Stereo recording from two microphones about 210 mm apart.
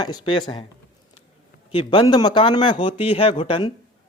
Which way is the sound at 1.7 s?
25° left (ahead or behind).